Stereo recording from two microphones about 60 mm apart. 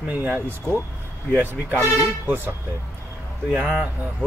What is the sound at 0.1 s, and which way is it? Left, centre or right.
Speech, right.